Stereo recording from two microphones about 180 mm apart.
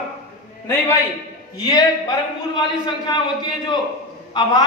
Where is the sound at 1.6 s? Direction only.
20° left (ahead or behind).